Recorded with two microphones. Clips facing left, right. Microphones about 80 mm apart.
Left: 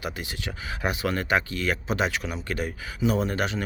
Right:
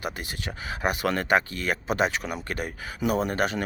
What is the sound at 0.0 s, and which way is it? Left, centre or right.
Speech, right.